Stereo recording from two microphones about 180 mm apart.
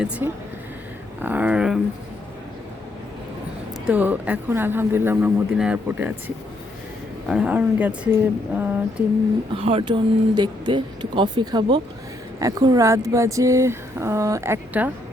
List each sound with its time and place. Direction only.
0.2 s speech: 10° right (ahead or behind)
3.8 s speech: 10° right (ahead or behind)
8.5 s a sound: 10° right (ahead or behind)
9.5 s speech: 30° right (ahead or behind); by 14.9 s 10° right (ahead or behind)